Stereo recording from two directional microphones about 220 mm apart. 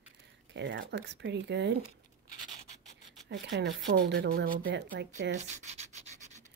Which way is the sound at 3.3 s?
50° right (ahead or behind).